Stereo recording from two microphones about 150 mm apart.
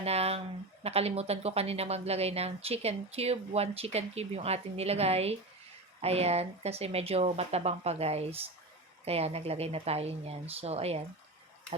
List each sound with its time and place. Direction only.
0.0 s speech: 45° right (ahead or behind)